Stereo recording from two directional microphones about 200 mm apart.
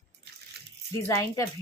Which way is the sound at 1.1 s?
15° left (ahead or behind).